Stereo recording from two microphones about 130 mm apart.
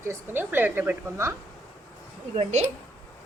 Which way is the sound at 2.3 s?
55° right (ahead or behind).